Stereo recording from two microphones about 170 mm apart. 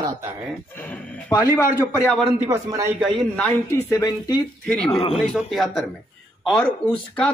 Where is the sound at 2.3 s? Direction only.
15° right (ahead or behind).